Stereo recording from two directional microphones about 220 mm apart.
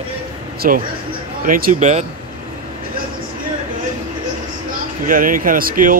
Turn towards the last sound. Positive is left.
turn(degrees=-40)  # may be behind; listen again after turning